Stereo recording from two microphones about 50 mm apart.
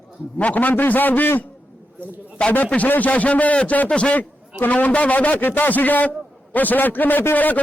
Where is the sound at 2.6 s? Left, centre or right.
Left.